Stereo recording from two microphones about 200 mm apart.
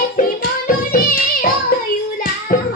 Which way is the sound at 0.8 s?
45° left (ahead or behind).